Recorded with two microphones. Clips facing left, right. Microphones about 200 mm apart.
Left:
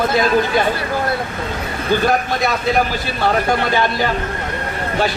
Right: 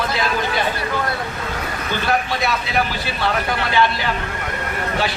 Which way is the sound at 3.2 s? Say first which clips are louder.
Left 5 dB; 45° left (ahead or behind).